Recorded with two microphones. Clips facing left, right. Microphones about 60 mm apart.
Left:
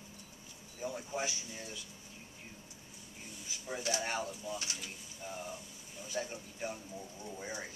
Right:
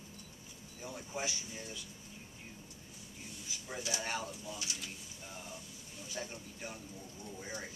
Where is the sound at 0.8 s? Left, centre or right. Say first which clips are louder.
Left 4 dB; centre.